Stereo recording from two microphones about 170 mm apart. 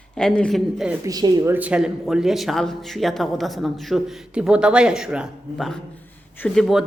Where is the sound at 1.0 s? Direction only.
25° right (ahead or behind).